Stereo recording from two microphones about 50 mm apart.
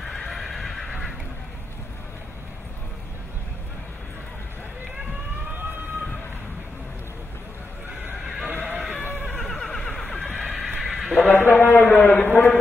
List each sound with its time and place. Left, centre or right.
0.0 s horse: centre
8.6 s goat: right
9.4 s neigh: centre
10.3 s horse: centre
11.3 s a man's voice: left